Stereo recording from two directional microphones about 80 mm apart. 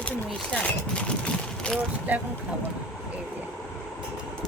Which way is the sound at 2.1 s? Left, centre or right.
Right.